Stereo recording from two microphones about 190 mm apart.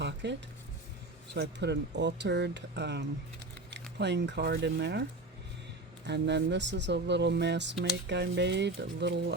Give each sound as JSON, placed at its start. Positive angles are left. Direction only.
{"t": 0.0, "sound": "a sound", "side_deg": -65}
{"t": 1.3, "sound": "speech", "side_deg": -65}
{"t": 6.1, "sound": "speech", "side_deg": -65}